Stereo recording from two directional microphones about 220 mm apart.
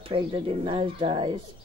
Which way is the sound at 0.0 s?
25° right (ahead or behind).